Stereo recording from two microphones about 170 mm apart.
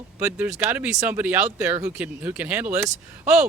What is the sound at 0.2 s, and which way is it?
Speech, 5° right (ahead or behind).